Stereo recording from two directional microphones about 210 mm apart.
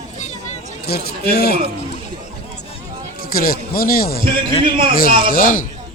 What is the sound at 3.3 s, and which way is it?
Speech, 45° left (ahead or behind).